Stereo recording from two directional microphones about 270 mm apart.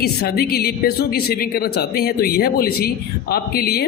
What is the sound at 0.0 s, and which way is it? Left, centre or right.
A man's voice, left.